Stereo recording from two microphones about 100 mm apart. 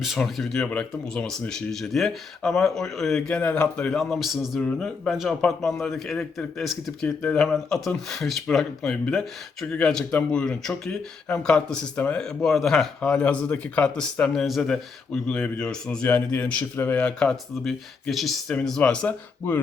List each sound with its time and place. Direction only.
0.0 s speech: centre (ahead or behind)
3.9 s speech: centre (ahead or behind)
18.8 s speech: 15° left (ahead or behind)